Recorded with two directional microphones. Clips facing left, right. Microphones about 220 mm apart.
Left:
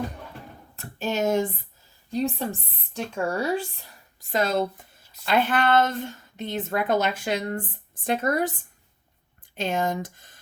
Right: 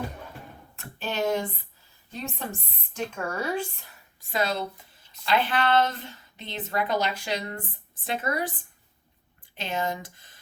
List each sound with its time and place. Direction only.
0.8 s a sound: 45° left (ahead or behind)
2.9 s speech: 35° left (ahead or behind)
4.3 s a woman's voice: 45° left (ahead or behind)
9.6 s a woman's voice: 45° left (ahead or behind)